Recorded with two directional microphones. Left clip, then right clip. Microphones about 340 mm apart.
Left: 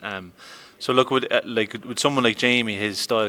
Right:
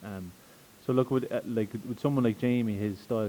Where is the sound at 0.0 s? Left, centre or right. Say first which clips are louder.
Left 12 dB; centre.